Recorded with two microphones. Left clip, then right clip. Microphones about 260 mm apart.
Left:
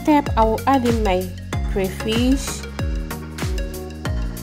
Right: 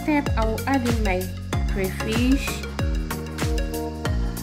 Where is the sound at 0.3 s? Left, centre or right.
Left.